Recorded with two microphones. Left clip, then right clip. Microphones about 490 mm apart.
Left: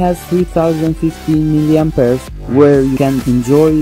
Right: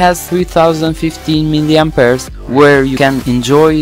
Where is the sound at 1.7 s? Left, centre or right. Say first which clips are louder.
Right 5 dB; centre.